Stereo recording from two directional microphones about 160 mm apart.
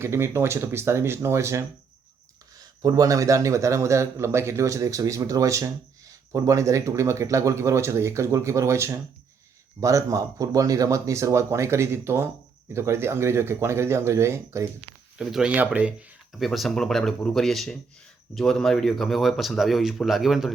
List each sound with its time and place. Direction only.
0.0 s a man's voice: 15° right (ahead or behind)
15.2 s speech: 5° right (ahead or behind)